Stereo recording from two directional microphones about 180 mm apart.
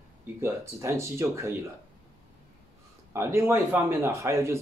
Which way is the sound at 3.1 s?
15° right (ahead or behind).